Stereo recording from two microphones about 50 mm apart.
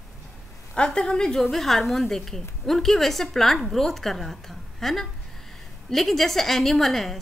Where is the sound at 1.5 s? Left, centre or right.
Centre.